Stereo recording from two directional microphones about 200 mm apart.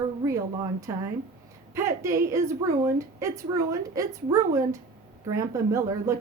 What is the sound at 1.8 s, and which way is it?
A woman's voice, 15° right (ahead or behind).